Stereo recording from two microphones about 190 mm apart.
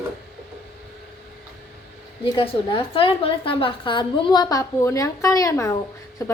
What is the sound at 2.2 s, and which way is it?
A woman's voice, 25° left (ahead or behind).